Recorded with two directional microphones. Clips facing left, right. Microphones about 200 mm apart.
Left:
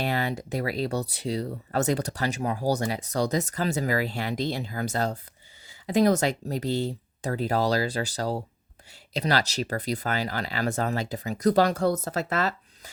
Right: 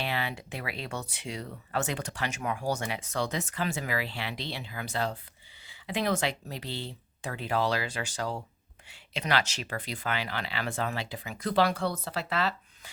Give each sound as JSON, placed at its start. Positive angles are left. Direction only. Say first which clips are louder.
{"t": 0.0, "sound": "speech", "louder": "left 5 dB", "side_deg": 45}